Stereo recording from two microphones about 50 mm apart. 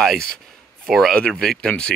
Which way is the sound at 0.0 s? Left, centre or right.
Centre.